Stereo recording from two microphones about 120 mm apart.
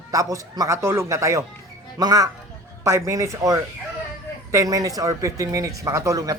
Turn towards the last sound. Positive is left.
turn(degrees=-25)  # may be behind; listen again after turning